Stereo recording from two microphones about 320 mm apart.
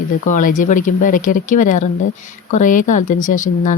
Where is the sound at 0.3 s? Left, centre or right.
Left.